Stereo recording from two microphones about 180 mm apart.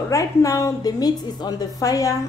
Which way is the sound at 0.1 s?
20° left (ahead or behind).